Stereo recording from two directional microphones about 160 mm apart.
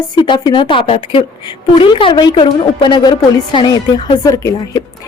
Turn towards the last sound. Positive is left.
turn(degrees=20)  # may be behind; listen again after turning